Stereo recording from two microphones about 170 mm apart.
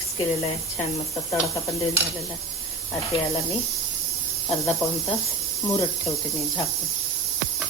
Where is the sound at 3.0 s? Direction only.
20° left (ahead or behind).